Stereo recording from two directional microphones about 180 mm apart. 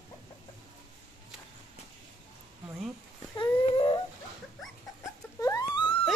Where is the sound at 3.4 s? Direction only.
25° left (ahead or behind).